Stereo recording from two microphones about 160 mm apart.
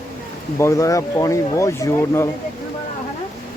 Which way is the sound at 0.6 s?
20° left (ahead or behind).